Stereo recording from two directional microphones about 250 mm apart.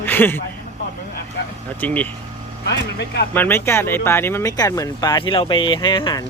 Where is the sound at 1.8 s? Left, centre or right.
Centre.